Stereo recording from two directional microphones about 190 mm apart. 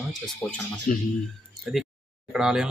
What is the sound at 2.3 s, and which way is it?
Speech, 5° right (ahead or behind).